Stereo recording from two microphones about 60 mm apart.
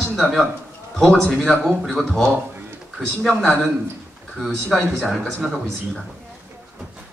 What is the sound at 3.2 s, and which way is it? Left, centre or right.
Speech, centre.